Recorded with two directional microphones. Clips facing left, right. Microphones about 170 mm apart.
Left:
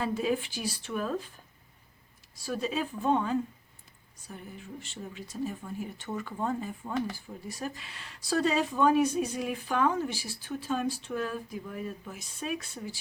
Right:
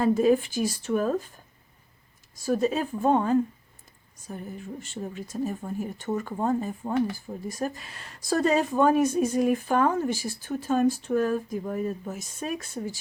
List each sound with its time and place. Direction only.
0.0 s speech: 45° right (ahead or behind)
2.3 s speech: 45° right (ahead or behind)